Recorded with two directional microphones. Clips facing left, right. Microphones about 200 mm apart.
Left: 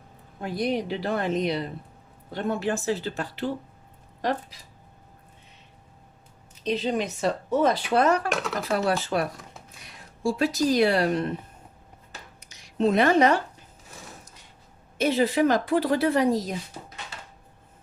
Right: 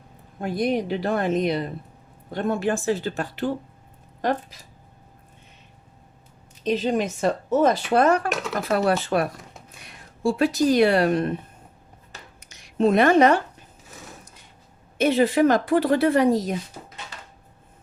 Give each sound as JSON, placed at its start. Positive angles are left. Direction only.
{"t": 0.4, "sound": "speech", "side_deg": -50}
{"t": 6.7, "sound": "a woman's voice", "side_deg": -45}
{"t": 12.4, "sound": "a sound", "side_deg": -55}
{"t": 14.9, "sound": "a woman's voice", "side_deg": -60}